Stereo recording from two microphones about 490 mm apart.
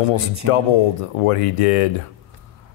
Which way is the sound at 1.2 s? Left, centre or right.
Left.